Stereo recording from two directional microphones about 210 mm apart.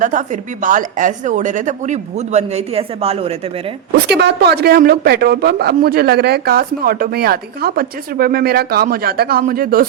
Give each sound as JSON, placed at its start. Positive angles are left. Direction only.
{"t": 0.0, "sound": "a woman's voice", "side_deg": -35}
{"t": 3.9, "sound": "speech", "side_deg": -50}